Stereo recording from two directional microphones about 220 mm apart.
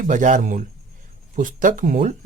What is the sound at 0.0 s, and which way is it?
Speech, 35° right (ahead or behind).